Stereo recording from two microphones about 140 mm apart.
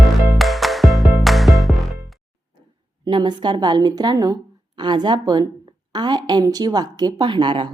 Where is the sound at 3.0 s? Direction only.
30° right (ahead or behind).